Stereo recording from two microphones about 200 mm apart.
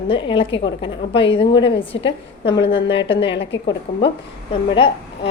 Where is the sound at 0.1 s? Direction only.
25° left (ahead or behind).